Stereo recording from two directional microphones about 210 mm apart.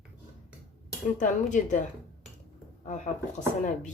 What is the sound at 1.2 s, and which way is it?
Speech, 35° left (ahead or behind).